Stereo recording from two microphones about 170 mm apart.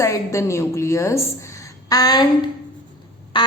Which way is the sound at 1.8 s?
20° left (ahead or behind).